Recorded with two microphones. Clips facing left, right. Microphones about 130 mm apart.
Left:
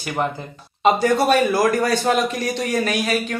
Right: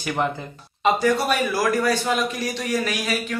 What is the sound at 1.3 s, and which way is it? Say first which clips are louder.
A man's voice: left 5 dB; 50° left (ahead or behind).